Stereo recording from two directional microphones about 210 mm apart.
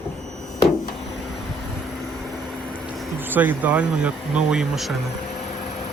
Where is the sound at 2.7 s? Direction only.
5° right (ahead or behind).